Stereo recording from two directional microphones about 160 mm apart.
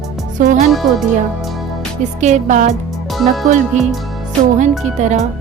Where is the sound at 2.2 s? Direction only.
50° right (ahead or behind).